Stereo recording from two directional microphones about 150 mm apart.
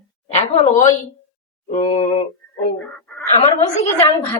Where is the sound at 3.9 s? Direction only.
15° left (ahead or behind).